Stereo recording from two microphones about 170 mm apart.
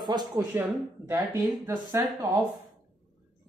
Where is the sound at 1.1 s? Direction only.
15° right (ahead or behind).